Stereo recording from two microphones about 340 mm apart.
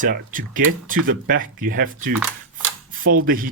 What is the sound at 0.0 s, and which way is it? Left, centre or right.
Speech, right.